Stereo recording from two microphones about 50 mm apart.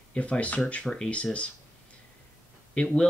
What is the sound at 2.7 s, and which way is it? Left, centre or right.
Speech, left.